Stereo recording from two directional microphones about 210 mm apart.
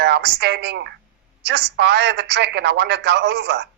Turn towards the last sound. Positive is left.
turn(degrees=-50)  # may be behind; listen again after turning